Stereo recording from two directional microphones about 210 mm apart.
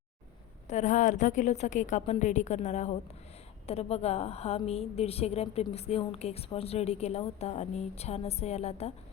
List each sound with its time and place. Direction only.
0.7 s a woman's voice: 35° left (ahead or behind)